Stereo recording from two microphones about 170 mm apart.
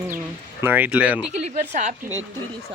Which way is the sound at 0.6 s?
10° right (ahead or behind).